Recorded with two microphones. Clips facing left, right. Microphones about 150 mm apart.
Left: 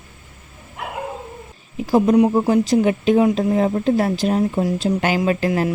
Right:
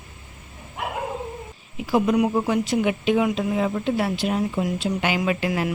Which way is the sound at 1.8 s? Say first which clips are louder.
Left 5 dB; 35° left (ahead or behind).